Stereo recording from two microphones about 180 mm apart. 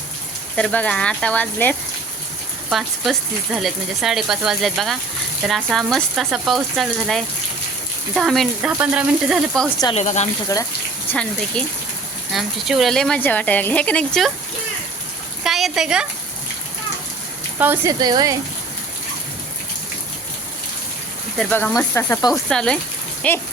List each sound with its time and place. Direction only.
0.5 s speech: 5° left (ahead or behind)
9.9 s speech: 40° left (ahead or behind)
11.1 s speech: 5° left (ahead or behind)
15.4 s speech: centre (ahead or behind)
17.6 s speech: 10° right (ahead or behind)
18.0 s speech: 20° right (ahead or behind)
21.3 s speech: 10° left (ahead or behind)
22.3 s speech: 5° left (ahead or behind)